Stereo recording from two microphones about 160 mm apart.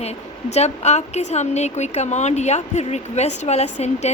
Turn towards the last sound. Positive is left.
turn(degrees=45)  # may be behind; listen again after turning